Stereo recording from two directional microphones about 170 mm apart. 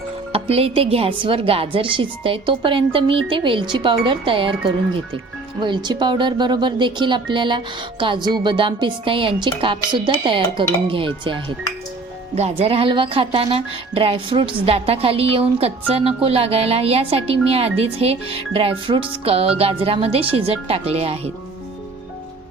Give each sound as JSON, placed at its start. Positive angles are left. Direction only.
{"t": 0.3, "sound": "speech", "side_deg": -35}